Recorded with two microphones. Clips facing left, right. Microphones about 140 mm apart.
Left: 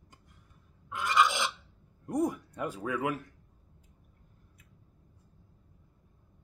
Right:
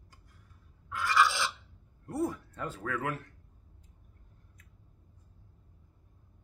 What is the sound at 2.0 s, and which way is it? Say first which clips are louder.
Speech: left 3 dB; 15° left (ahead or behind).